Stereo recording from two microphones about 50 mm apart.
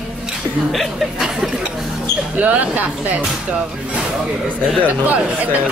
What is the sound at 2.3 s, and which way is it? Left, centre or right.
Speech, right.